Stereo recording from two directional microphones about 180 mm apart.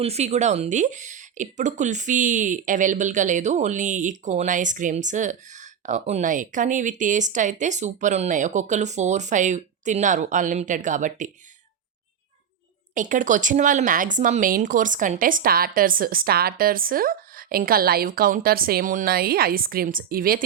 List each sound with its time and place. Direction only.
0.0 s speech: 35° right (ahead or behind)
12.9 s speech: 45° right (ahead or behind)